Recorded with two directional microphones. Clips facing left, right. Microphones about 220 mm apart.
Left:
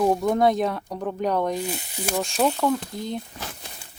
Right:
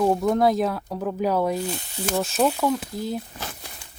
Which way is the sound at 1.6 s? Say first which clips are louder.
Right 1 dB; 15° left (ahead or behind).